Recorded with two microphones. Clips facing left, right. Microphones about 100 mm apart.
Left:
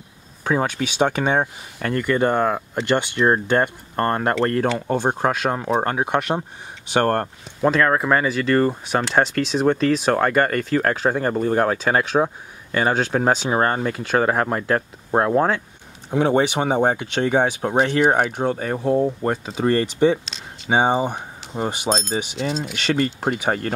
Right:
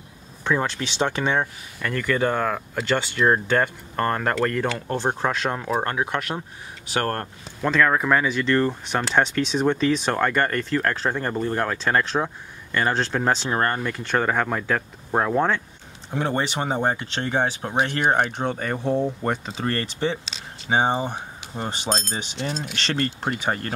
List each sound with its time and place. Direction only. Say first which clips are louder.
0.5 s speech: left 3 dB; 10° left (ahead or behind); by 4.2 s 35° left (ahead or behind)
4.7 s speech: left 4 dB; 15° left (ahead or behind)
7.7 s speech: right 1 dB; 5° left (ahead or behind)
17.7 s speech: left 4 dB; 5° left (ahead or behind)
19.6 s speech: left 10 dB; 15° left (ahead or behind)
20.2 s a sound: left 3 dB; centre (ahead or behind)
20.7 s speech: left 3 dB; 15° left (ahead or behind)